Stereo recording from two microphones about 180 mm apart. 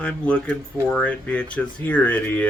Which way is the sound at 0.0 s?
5° left (ahead or behind).